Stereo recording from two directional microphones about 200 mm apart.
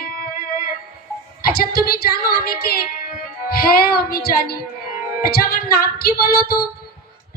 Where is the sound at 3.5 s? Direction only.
50° left (ahead or behind).